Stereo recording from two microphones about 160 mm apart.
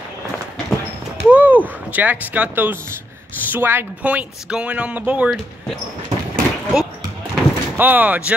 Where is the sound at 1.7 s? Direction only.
10° right (ahead or behind).